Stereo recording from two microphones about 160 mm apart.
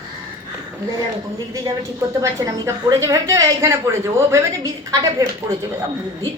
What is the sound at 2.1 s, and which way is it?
A woman's voice, 20° right (ahead or behind).